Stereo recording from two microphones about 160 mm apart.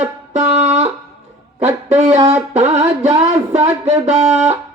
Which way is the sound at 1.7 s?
40° right (ahead or behind).